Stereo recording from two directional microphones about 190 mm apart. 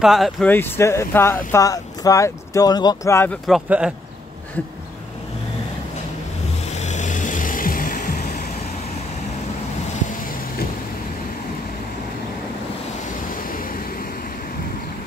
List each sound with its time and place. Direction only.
0.0 s speech: centre (ahead or behind)
0.5 s speech: 10° left (ahead or behind)
3.4 s speech: 5° right (ahead or behind)
6.7 s music: 35° left (ahead or behind)
13.5 s waves: 50° left (ahead or behind)